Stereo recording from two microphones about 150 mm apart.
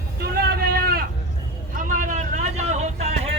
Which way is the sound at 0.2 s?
90° right.